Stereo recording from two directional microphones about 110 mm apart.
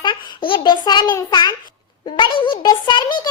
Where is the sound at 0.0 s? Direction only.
50° left (ahead or behind).